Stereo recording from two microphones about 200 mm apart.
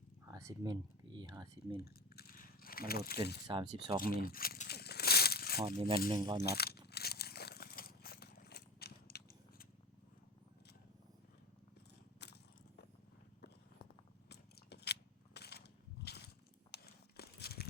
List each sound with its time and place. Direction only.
0.3 s speech: 15° right (ahead or behind)
1.8 s a sound: 50° left (ahead or behind)
3.4 s speech: 20° right (ahead or behind)
4.2 s a sound: 45° left (ahead or behind)
4.8 s crumpling: 55° left (ahead or behind)
5.6 s speech: 25° right (ahead or behind)
6.4 s speech: 50° left (ahead or behind)
6.8 s crunch: 55° left (ahead or behind)
12.2 s biting: 55° left (ahead or behind)
14.3 s biting: 55° left (ahead or behind)
16.7 s a sound: 50° left (ahead or behind)